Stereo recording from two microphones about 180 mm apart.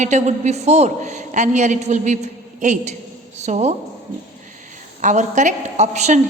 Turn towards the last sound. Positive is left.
turn(degrees=-40)  # may be behind; listen again after turning